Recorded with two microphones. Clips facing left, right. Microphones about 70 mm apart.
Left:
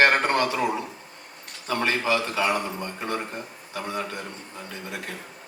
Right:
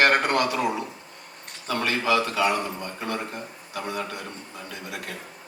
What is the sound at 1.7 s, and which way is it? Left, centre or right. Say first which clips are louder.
Speech: even; left.